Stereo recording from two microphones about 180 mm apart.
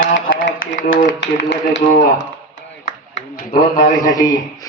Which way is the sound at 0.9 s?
80° left.